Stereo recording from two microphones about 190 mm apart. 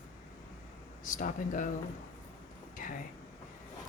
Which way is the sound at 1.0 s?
45° left (ahead or behind).